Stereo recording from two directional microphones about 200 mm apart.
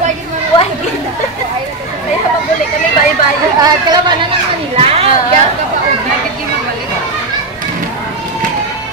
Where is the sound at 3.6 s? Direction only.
20° right (ahead or behind).